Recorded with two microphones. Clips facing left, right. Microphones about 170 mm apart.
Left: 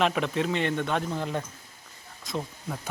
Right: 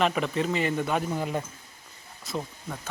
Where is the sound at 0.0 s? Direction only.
Centre (ahead or behind).